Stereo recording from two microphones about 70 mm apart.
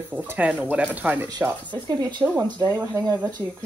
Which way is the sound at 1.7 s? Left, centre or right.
Right.